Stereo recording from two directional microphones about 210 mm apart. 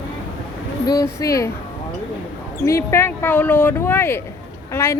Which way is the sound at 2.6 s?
15° left (ahead or behind).